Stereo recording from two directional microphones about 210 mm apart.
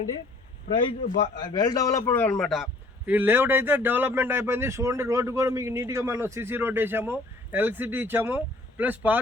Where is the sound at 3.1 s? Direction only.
10° right (ahead or behind).